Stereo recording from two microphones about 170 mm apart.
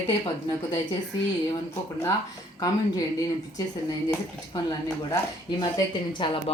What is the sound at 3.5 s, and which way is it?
Speech, 20° left (ahead or behind).